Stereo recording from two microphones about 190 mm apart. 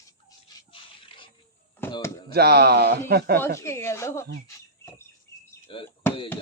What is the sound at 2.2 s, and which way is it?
Speech, 55° right (ahead or behind).